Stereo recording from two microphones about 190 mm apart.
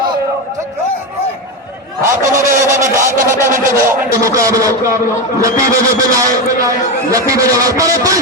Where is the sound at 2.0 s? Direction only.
15° right (ahead or behind).